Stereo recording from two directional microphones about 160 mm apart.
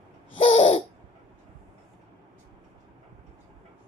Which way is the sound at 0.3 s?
40° left (ahead or behind).